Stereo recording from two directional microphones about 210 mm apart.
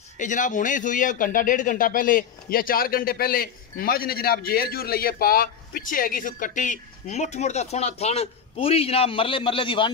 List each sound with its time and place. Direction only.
0.2 s a man's voice: 35° left (ahead or behind)